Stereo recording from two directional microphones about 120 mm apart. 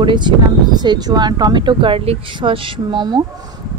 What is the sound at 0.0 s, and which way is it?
Speech, 40° right (ahead or behind).